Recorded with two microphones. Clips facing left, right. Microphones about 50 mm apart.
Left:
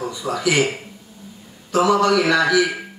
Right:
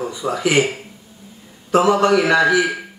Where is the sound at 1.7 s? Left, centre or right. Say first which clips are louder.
Right 2 dB; right.